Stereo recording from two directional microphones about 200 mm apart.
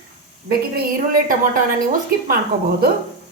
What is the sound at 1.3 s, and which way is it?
A woman's voice, 45° right (ahead or behind).